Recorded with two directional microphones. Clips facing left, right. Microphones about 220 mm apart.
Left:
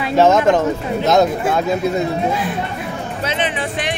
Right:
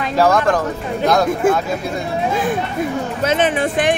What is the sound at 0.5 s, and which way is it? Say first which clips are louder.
Speech: left 3 dB; 25° left (ahead or behind).